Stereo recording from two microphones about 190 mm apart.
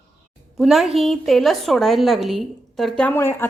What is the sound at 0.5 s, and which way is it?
A woman's voice, centre (ahead or behind).